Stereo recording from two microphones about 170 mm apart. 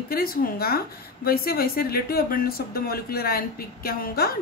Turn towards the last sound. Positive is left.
turn(degrees=60)  # may be behind; listen again after turning